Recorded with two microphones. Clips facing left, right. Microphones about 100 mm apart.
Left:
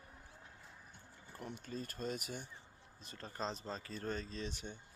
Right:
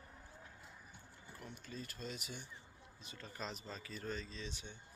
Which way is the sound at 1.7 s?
40° left (ahead or behind).